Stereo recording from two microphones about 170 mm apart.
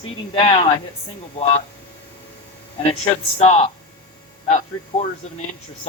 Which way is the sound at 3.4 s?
40° left (ahead or behind).